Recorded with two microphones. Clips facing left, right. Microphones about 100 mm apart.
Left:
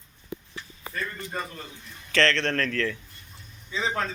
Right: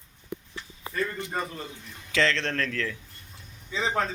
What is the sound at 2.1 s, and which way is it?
Speech, 5° right (ahead or behind).